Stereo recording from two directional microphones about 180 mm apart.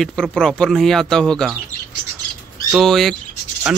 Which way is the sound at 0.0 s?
5° left (ahead or behind).